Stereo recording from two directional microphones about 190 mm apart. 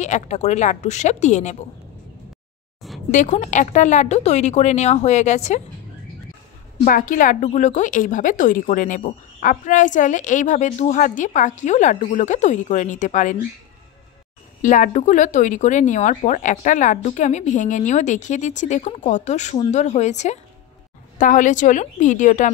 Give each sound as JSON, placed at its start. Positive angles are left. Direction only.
{"t": 0.0, "sound": "a woman's voice", "side_deg": 35}
{"t": 3.1, "sound": "a woman's voice", "side_deg": 40}
{"t": 6.8, "sound": "a woman's voice", "side_deg": 45}
{"t": 14.6, "sound": "a woman's voice", "side_deg": 40}